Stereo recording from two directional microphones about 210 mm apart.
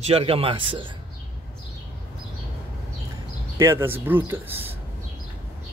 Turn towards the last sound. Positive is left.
turn(degrees=-10)  # may be behind; listen again after turning